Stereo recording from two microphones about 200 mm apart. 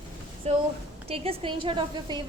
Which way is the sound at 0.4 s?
35° right (ahead or behind).